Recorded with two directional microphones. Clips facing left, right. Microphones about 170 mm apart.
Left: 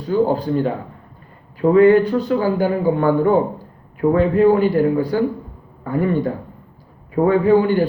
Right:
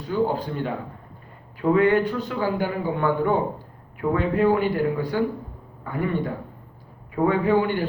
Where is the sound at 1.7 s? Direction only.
35° left (ahead or behind).